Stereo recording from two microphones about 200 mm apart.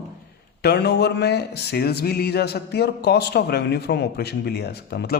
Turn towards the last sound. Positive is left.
turn(degrees=50)  # may be behind; listen again after turning